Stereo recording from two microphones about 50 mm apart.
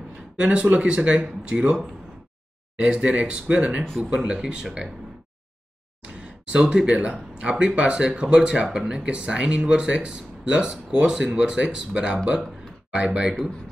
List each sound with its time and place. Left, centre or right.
0.4 s speech: right
2.8 s speech: centre
6.0 s speech: centre